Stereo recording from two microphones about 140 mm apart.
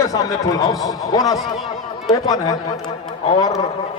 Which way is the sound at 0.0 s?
25° left (ahead or behind).